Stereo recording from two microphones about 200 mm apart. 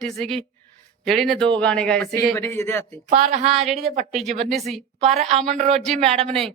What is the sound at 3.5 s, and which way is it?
Speech, centre (ahead or behind).